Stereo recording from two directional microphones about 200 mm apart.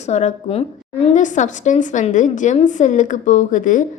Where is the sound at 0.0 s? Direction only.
35° left (ahead or behind).